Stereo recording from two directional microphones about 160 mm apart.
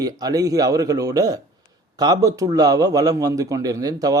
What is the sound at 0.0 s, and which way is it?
Speech, 25° right (ahead or behind).